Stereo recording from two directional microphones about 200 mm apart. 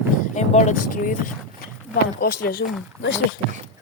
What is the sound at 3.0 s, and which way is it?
Speech, 75° left (ahead or behind).